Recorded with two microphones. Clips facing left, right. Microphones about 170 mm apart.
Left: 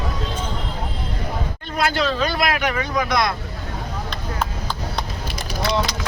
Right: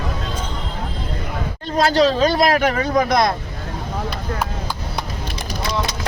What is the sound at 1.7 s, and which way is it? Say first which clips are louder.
Speech: right 6 dB; 40° right (ahead or behind).